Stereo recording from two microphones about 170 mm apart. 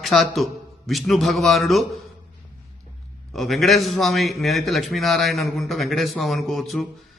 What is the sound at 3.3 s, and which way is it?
A man's voice, centre (ahead or behind).